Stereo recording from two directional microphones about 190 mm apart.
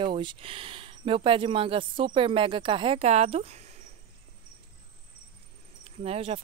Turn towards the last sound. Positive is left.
turn(degrees=-30)  # may be behind; listen again after turning